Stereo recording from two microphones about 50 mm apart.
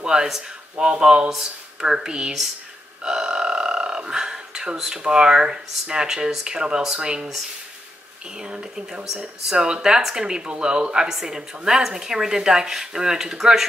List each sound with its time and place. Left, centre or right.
0.0 s speech: centre
8.4 s speech: centre